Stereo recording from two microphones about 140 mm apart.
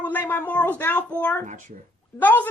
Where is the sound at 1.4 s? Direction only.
70° right (ahead or behind).